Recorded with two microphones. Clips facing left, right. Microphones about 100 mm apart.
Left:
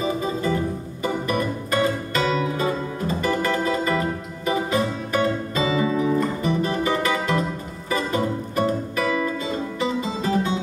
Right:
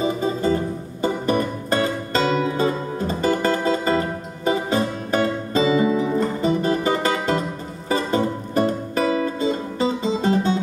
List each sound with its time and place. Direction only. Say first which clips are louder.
0.0 s music: right 3 dB; 30° right (ahead or behind)